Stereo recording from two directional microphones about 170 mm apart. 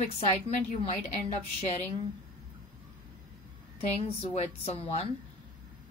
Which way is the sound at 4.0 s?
35° left (ahead or behind).